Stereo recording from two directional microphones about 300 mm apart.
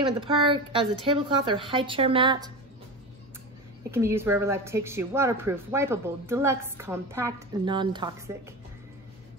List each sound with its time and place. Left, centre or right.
0.0 s speech: centre
3.9 s speech: centre